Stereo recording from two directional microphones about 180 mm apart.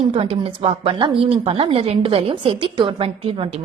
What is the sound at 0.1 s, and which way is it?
A woman's voice, 30° right (ahead or behind).